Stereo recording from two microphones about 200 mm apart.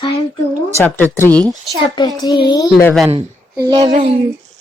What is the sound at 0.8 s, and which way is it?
Speech, 10° left (ahead or behind).